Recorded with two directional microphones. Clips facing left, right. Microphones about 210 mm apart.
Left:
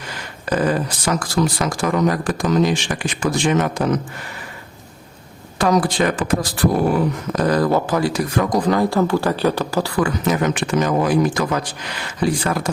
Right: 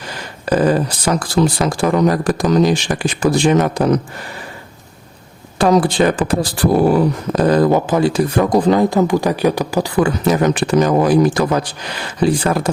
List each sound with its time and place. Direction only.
0.4 s speech: 30° right (ahead or behind)
5.5 s speech: 25° right (ahead or behind)
10.0 s speech: 35° right (ahead or behind)